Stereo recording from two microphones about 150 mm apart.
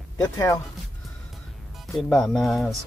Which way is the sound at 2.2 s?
Centre (ahead or behind).